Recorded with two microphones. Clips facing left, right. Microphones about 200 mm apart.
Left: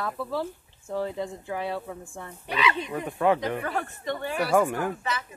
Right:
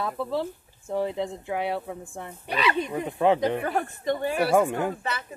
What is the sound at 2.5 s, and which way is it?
Speech, 45° right (ahead or behind).